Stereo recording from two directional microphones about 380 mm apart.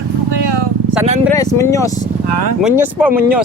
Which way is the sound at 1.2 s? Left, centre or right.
Centre.